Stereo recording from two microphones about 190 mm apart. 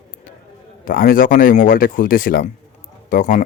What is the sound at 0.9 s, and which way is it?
Speech, 45° left (ahead or behind).